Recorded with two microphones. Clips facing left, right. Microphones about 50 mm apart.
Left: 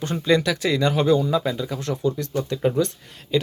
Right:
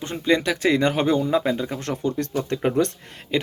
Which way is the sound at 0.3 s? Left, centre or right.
Right.